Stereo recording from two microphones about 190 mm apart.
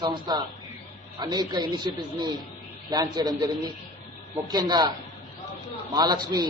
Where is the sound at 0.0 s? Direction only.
25° right (ahead or behind).